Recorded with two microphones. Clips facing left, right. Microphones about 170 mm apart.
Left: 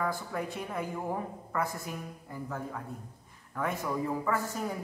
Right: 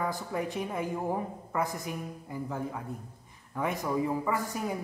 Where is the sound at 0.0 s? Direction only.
20° right (ahead or behind).